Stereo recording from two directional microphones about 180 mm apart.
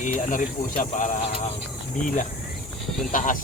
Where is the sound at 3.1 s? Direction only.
45° left (ahead or behind).